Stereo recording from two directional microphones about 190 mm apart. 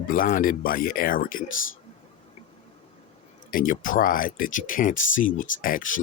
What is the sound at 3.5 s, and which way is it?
Speech, 45° left (ahead or behind).